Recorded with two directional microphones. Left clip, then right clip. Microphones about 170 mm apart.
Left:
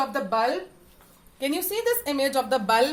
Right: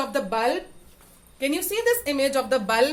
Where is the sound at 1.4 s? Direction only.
10° right (ahead or behind).